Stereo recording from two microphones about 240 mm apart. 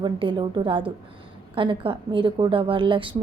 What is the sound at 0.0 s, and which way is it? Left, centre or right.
A woman's voice, centre.